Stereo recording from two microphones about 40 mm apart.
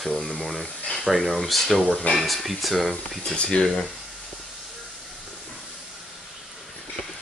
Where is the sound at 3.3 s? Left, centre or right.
Left.